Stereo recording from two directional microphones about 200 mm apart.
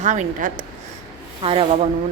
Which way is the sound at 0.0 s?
35° right (ahead or behind).